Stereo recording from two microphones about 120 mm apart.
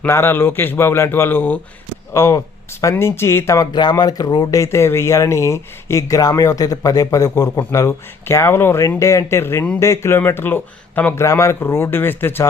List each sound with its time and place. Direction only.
0.0 s speech: 20° left (ahead or behind)